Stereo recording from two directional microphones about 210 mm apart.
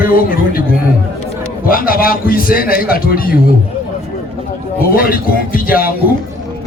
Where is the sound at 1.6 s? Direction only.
45° left (ahead or behind).